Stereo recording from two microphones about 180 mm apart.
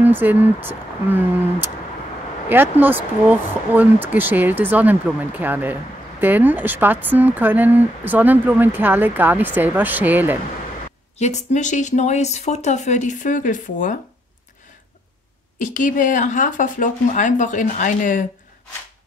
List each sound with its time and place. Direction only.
0.0 s speech: 10° right (ahead or behind)
11.1 s speech: 40° left (ahead or behind)
15.6 s speech: 45° left (ahead or behind)